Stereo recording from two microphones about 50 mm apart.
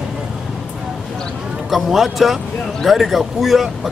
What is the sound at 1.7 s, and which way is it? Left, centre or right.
A man's voice, centre.